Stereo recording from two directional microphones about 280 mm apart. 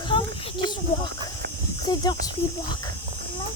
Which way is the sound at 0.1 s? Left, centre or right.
Centre.